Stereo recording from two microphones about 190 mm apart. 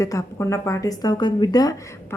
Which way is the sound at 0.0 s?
15° left (ahead or behind).